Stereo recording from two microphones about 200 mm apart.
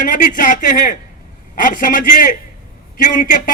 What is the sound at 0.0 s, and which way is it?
A man's voice, 45° left (ahead or behind).